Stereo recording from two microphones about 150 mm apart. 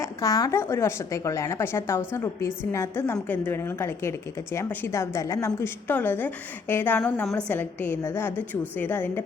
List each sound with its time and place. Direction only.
0.0 s a woman's voice: 20° left (ahead or behind)